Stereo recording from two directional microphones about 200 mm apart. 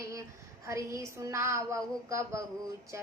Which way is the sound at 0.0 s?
15° right (ahead or behind).